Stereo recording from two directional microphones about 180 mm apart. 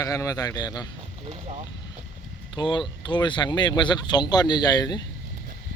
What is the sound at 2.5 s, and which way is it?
Speech, 25° left (ahead or behind).